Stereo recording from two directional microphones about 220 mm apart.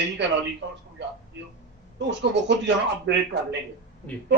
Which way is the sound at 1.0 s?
55° right (ahead or behind).